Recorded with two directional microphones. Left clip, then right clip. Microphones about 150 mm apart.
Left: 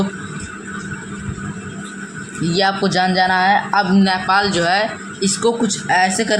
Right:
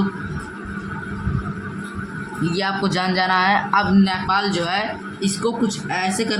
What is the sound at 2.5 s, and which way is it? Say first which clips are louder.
A man's voice: left 6 dB; 35° left (ahead or behind).